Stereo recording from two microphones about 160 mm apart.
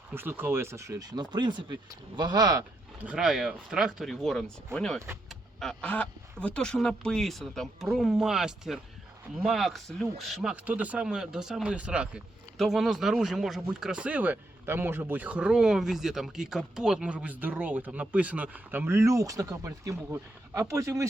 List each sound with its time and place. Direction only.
0.1 s speech: 15° right (ahead or behind)
3.0 s speech: 5° right (ahead or behind)